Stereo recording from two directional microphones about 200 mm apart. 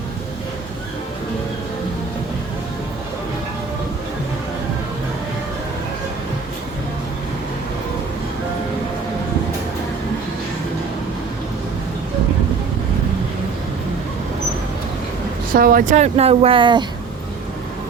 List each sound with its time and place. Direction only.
15.5 s speech: 45° right (ahead or behind); by 16.8 s 25° right (ahead or behind)